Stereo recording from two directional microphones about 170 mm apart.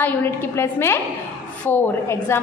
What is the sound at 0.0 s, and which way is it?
A woman's voice, 10° left (ahead or behind).